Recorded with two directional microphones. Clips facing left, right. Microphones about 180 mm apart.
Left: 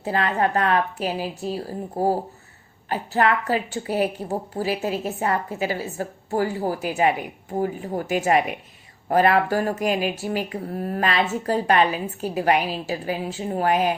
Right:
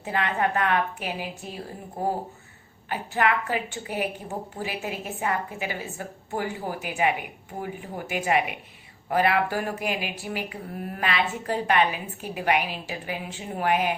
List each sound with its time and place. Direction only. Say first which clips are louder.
0.0 s speech: left 4 dB; 35° left (ahead or behind)